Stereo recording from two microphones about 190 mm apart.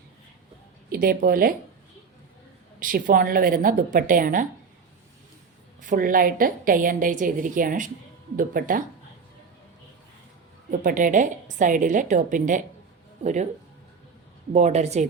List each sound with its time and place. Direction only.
0.9 s a woman's voice: 50° right (ahead or behind)
2.8 s a woman's voice: 45° right (ahead or behind)
5.8 s a woman's voice: 45° right (ahead or behind)
10.7 s a woman's voice: 45° right (ahead or behind)
14.5 s a woman's voice: 35° right (ahead or behind)